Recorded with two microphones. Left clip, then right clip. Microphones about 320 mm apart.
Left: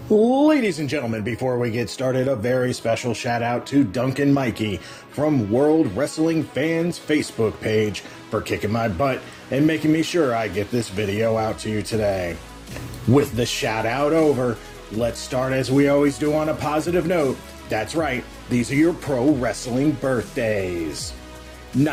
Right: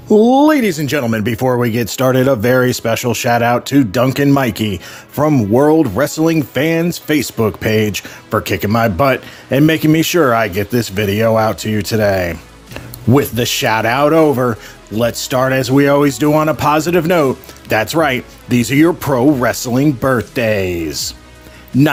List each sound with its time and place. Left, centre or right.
0.1 s speech: right